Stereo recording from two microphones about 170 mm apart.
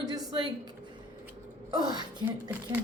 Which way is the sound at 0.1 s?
25° right (ahead or behind).